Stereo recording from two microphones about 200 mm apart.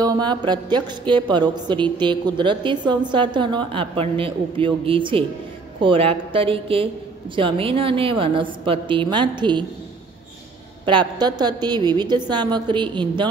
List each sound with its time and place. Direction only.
0.0 s a woman's voice: 20° right (ahead or behind)
10.9 s a woman's voice: 20° right (ahead or behind)